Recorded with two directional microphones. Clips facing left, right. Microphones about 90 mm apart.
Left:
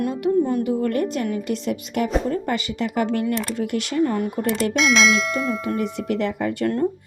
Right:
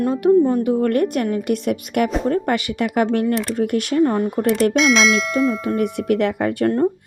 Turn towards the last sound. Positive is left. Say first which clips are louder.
# right 4 dB
turn(degrees=-55)  # may be behind; listen again after turning